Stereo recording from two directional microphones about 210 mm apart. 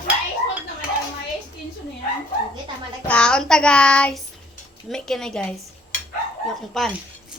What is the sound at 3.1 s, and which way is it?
Child singing, 5° left (ahead or behind).